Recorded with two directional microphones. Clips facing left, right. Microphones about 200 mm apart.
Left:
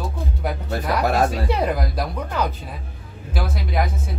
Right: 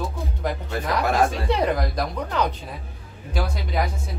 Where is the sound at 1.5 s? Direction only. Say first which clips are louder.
Even; 5° left (ahead or behind).